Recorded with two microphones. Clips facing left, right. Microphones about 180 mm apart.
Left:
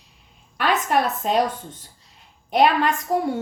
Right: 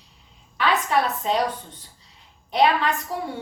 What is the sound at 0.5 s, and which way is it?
Speech, 50° left (ahead or behind).